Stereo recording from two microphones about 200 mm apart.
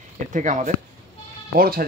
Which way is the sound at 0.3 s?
40° right (ahead or behind).